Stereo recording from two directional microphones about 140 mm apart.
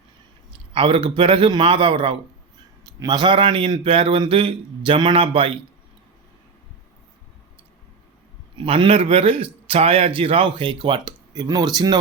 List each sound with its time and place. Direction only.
0.7 s a man's voice: 40° right (ahead or behind)
8.5 s a man's voice: 40° right (ahead or behind)